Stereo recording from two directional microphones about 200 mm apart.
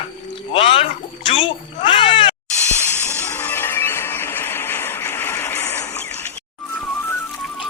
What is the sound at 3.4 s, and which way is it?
Music, 10° left (ahead or behind).